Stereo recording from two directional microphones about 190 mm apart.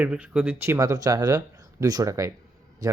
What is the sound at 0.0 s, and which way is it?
A man's voice, 5° right (ahead or behind).